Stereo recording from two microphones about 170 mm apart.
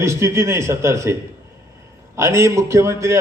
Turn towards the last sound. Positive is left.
turn(degrees=-15)  # may be behind; listen again after turning